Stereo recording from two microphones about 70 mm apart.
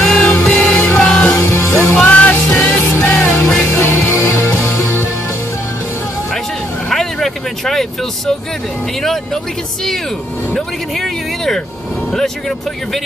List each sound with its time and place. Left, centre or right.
0.0 s music: centre
1.4 s music: left
1.8 s music: left
4.3 s music: left
6.9 s vehicle: centre
9.0 s speech: centre
10.5 s speech: centre